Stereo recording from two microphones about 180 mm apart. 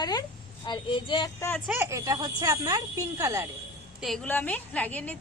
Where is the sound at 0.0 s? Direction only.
20° left (ahead or behind).